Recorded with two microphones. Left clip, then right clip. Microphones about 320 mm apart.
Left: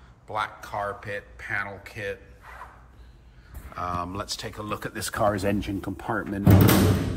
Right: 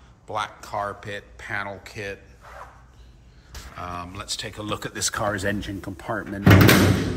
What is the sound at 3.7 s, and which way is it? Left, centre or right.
Speech, centre.